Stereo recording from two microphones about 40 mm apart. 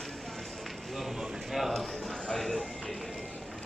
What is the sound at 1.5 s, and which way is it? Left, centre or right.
Speech, centre.